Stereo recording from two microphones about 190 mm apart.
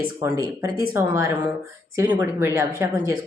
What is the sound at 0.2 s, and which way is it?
Speech, 15° right (ahead or behind).